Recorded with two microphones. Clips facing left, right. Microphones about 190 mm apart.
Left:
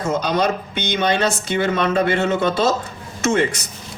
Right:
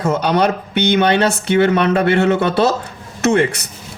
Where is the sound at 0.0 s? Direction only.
60° right (ahead or behind).